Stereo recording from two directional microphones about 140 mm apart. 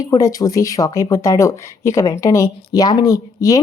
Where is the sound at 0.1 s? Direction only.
25° left (ahead or behind).